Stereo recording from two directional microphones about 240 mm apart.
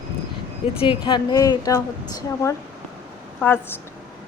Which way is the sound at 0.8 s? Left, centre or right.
Centre.